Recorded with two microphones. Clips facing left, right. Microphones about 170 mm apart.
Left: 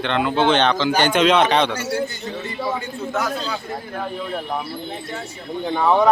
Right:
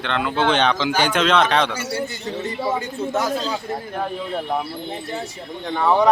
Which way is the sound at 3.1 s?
25° right (ahead or behind).